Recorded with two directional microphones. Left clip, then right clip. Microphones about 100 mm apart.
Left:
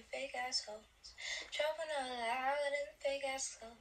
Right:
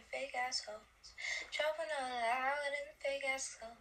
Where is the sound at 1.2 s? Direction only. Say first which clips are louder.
Right 1 dB; 50° right (ahead or behind).